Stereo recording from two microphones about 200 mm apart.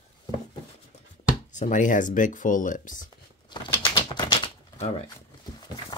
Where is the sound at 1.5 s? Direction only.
40° left (ahead or behind).